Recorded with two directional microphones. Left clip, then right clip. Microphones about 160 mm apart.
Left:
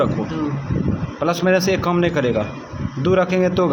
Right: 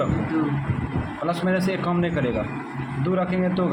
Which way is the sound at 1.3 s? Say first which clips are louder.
Left 7 dB; 45° left (ahead or behind).